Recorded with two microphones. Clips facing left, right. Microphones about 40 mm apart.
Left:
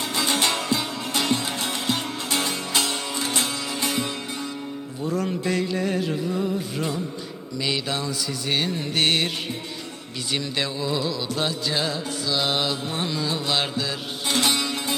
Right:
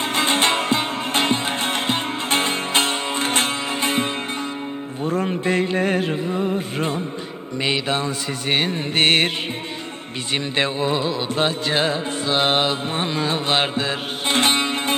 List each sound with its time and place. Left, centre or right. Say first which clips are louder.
0.0 s music: right 4 dB; right
10.3 s music: right 5 dB; right